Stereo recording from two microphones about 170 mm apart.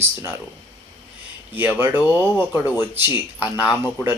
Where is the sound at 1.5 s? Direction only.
10° right (ahead or behind).